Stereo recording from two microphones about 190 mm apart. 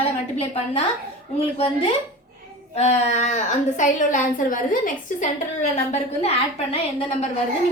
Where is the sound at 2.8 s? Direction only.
35° left (ahead or behind).